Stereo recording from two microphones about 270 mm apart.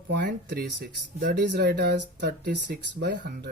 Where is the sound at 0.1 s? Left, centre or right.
Right.